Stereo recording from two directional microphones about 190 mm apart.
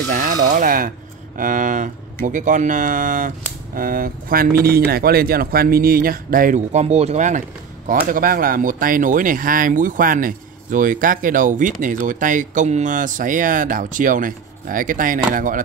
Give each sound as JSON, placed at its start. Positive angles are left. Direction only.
{"t": 0.1, "sound": "speech", "side_deg": -45}